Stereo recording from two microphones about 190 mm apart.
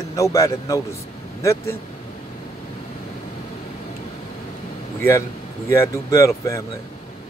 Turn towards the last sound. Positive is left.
turn(degrees=15)  # may be behind; listen again after turning